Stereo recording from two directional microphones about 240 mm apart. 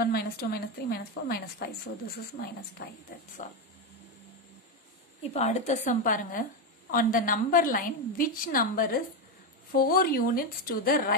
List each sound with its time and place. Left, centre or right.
0.0 s a woman's voice: left
2.8 s a woman's voice: left
5.2 s a woman's voice: left